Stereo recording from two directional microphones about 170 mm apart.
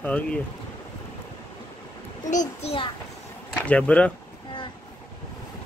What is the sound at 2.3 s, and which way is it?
Speech, 45° left (ahead or behind).